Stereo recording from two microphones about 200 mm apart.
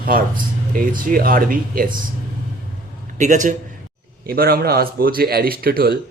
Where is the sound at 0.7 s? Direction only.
45° right (ahead or behind).